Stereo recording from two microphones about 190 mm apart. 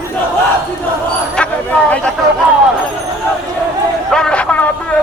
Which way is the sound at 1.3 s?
5° left (ahead or behind).